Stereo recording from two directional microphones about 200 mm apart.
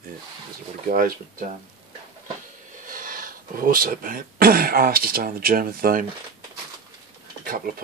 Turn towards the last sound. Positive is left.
turn(degrees=-45)  # may be behind; listen again after turning